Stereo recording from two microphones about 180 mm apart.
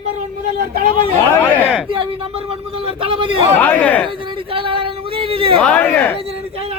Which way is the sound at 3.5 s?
10° left (ahead or behind).